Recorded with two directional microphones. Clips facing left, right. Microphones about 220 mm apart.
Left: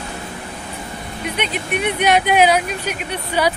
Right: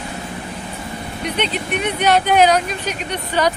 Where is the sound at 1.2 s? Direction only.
10° left (ahead or behind).